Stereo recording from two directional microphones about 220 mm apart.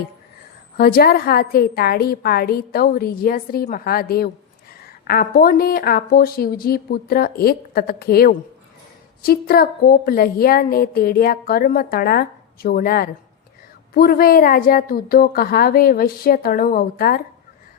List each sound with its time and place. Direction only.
0.8 s a woman's voice: 45° left (ahead or behind)